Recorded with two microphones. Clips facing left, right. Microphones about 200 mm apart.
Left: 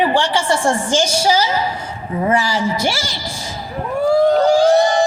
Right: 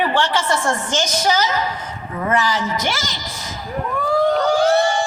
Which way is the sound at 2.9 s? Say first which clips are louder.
Left 1 dB; 10° left (ahead or behind).